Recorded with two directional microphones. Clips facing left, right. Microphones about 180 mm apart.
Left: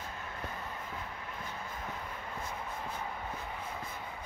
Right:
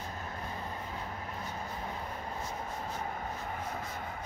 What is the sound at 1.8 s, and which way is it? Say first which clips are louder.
Vehicle: right 2 dB; 35° right (ahead or behind).